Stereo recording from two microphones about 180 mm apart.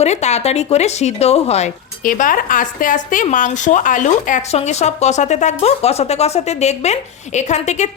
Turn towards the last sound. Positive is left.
turn(degrees=40)  # may be behind; listen again after turning